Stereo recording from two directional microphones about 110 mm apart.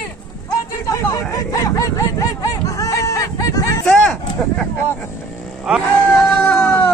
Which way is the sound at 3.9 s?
5° left (ahead or behind).